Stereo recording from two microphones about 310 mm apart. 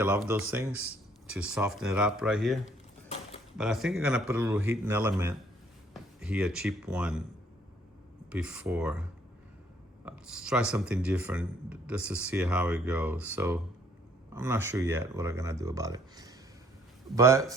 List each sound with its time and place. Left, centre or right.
0.0 s speech: centre
3.6 s speech: centre
8.3 s speech: centre
10.1 s speech: centre